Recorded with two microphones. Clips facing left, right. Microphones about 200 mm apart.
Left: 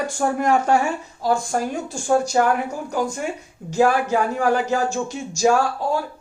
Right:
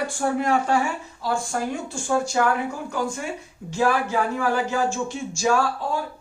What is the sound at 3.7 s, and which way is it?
Speech, 45° left (ahead or behind).